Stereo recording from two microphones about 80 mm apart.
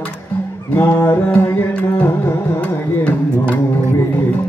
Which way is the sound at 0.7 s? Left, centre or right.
Left.